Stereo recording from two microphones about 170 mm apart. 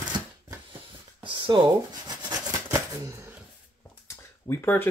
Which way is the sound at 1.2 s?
30° right (ahead or behind).